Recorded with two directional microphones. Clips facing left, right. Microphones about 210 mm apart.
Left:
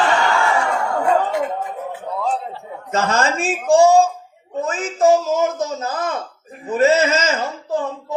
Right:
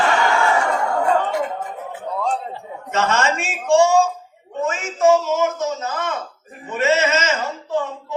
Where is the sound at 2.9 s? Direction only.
35° left (ahead or behind).